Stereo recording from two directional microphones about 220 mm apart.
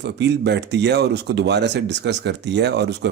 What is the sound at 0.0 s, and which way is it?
Speech, 50° right (ahead or behind).